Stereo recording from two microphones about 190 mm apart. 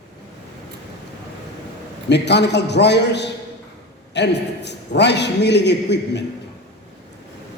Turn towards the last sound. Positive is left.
turn(degrees=65)  # may be behind; listen again after turning